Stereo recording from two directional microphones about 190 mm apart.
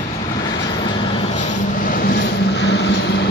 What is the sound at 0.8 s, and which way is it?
Vehicle, 30° left (ahead or behind).